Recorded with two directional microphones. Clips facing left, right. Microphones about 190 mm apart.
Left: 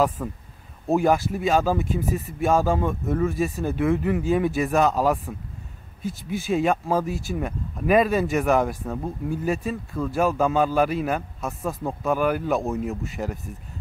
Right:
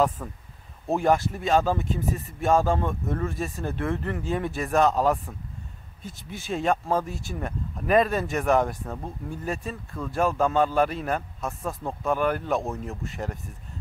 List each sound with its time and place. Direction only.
0.2 s a man's voice: 5° left (ahead or behind)